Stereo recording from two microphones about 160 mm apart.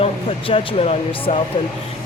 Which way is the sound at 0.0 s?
35° left (ahead or behind).